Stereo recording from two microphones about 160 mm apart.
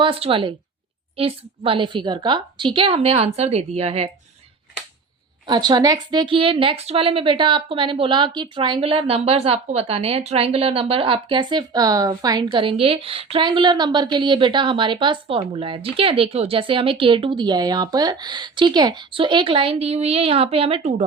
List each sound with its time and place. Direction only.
0.0 s a woman's voice: 35° right (ahead or behind)
5.5 s a woman's voice: 25° right (ahead or behind)
12.5 s a woman's voice: 35° right (ahead or behind)